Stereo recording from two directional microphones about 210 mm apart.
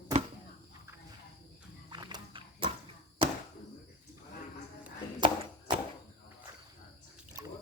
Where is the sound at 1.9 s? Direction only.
20° right (ahead or behind).